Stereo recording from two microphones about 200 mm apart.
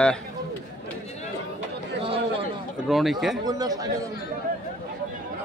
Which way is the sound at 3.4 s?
20° right (ahead or behind).